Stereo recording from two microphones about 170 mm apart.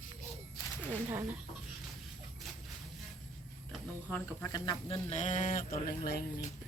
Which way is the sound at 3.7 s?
10° left (ahead or behind).